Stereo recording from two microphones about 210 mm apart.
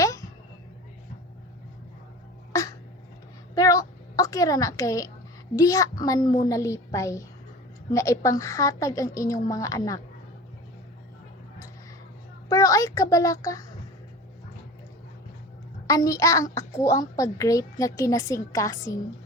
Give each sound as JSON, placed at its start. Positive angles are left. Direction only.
{"t": 2.5, "sound": "a sound", "side_deg": 15}
{"t": 5.5, "sound": "a child's voice", "side_deg": 15}
{"t": 12.5, "sound": "a child's voice", "side_deg": 15}
{"t": 15.9, "sound": "a child's voice", "side_deg": 15}